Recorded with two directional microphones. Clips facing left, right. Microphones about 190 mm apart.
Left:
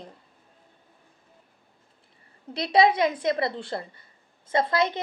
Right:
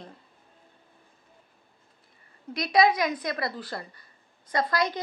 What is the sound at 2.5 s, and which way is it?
A woman's voice, 30° left (ahead or behind).